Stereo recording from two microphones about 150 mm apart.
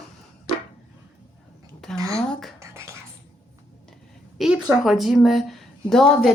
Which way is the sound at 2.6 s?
20° right (ahead or behind).